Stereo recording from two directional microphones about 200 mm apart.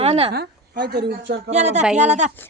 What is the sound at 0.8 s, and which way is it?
Speech, 55° right (ahead or behind).